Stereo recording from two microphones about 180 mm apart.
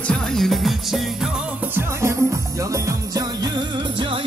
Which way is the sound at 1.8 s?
15° right (ahead or behind).